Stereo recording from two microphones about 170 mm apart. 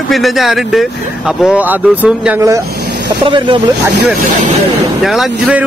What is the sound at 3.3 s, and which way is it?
Speech, 30° right (ahead or behind).